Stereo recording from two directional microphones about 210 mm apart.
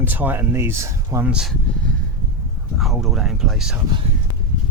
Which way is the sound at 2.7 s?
Centre (ahead or behind).